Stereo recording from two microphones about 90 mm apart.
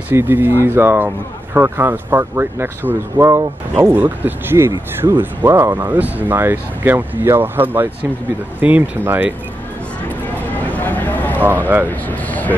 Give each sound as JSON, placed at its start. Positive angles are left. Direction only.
{"t": 0.1, "sound": "speech", "side_deg": -25}
{"t": 10.7, "sound": "a sound", "side_deg": 20}
{"t": 12.1, "sound": "speech", "side_deg": 20}